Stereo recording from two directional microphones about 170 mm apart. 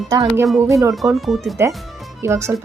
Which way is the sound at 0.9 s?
Centre (ahead or behind).